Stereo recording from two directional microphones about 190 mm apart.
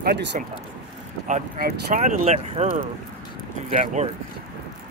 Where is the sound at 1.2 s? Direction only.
45° right (ahead or behind).